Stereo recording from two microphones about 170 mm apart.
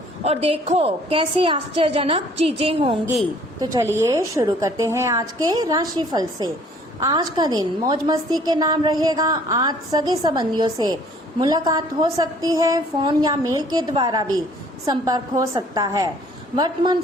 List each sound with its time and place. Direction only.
0.3 s a woman's voice: 35° right (ahead or behind)
3.9 s a woman's voice: 15° right (ahead or behind)